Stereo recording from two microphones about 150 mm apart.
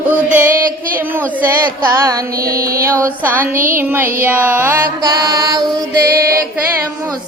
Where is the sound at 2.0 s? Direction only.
20° right (ahead or behind).